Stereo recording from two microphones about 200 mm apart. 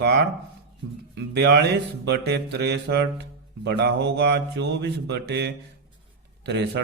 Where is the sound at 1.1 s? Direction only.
55° right (ahead or behind).